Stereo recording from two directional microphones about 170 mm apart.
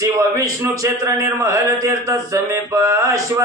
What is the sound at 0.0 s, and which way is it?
A man's voice, 20° right (ahead or behind).